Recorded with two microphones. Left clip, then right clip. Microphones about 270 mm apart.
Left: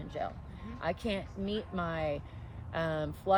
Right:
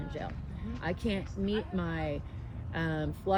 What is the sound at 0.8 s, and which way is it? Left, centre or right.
Speech, centre.